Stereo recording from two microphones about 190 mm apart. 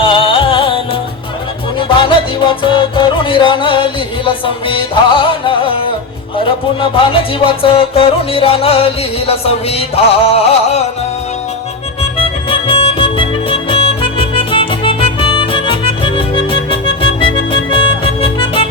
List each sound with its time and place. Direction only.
0.0 s music: 25° left (ahead or behind)
2.0 s music: 25° left (ahead or behind)
7.1 s music: 30° left (ahead or behind)
12.2 s music: 30° left (ahead or behind)